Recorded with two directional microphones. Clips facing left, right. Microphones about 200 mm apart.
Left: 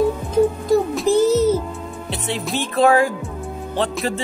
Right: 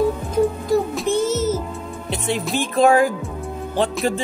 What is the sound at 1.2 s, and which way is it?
Music, 35° left (ahead or behind).